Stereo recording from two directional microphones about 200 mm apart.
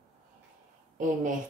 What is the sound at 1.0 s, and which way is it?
Speech, 40° right (ahead or behind).